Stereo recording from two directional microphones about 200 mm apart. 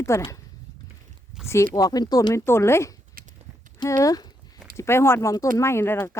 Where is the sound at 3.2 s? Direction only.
45° right (ahead or behind).